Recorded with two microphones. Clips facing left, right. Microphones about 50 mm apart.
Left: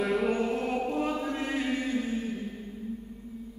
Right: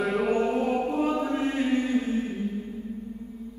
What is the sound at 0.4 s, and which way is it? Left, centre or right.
Music, right.